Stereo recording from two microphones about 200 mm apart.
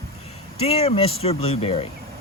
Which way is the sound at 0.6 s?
30° left (ahead or behind).